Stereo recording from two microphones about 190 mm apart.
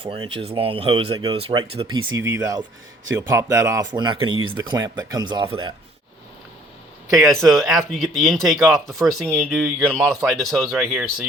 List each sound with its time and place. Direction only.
0.0 s speech: 30° right (ahead or behind)
2.1 s speech: 15° right (ahead or behind)
4.3 s speech: 90° right
4.5 s speech: 20° right (ahead or behind)
7.2 s speech: centre (ahead or behind)
9.2 s speech: 10° right (ahead or behind)
9.5 s speech: centre (ahead or behind)